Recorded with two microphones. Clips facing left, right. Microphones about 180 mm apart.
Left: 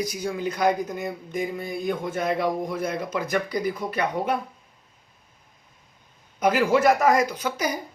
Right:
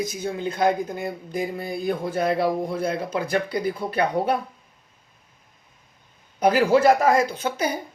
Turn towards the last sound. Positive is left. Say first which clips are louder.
# right 2 dB
turn(degrees=-25)  # may be behind; listen again after turning